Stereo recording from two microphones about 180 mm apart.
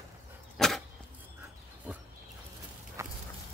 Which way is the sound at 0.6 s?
Centre (ahead or behind).